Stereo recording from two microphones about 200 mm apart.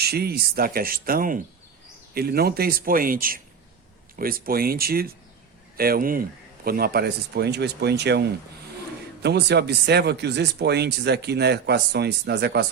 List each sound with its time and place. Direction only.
0.0 s speech: 50° right (ahead or behind)
9.2 s speech: 55° right (ahead or behind)